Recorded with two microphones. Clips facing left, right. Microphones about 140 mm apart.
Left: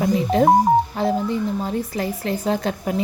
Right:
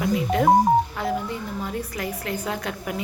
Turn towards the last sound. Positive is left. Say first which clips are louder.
# left 7 dB
turn(degrees=30)  # may be behind; listen again after turning